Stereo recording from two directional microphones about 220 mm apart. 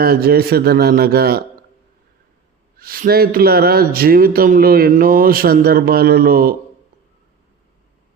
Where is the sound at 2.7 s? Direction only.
40° right (ahead or behind).